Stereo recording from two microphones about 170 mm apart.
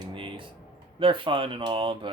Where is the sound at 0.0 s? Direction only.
30° right (ahead or behind).